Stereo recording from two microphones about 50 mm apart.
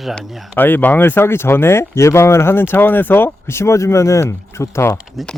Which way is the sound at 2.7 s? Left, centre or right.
Left.